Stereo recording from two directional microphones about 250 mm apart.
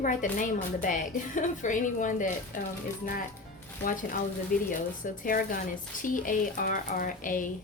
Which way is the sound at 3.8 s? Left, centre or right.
Left.